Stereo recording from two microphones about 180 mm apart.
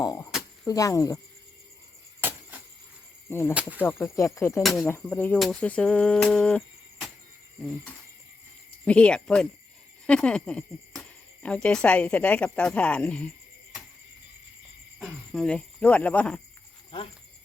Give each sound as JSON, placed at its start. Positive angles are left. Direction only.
{"t": 0.0, "sound": "speech", "side_deg": 20}
{"t": 0.3, "sound": "a sound", "side_deg": 0}
{"t": 0.7, "sound": "speech", "side_deg": 20}
{"t": 3.2, "sound": "cricket", "side_deg": 15}
{"t": 3.5, "sound": "speech", "side_deg": -10}
{"t": 3.8, "sound": "a woman's voice", "side_deg": 15}
{"t": 4.6, "sound": "speech", "side_deg": 0}
{"t": 4.9, "sound": "a woman's voice", "side_deg": 10}
{"t": 8.8, "sound": "a woman's voice", "side_deg": 5}
{"t": 15.3, "sound": "a woman's voice", "side_deg": 5}